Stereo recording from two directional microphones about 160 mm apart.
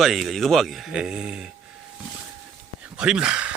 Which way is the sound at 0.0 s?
Centre (ahead or behind).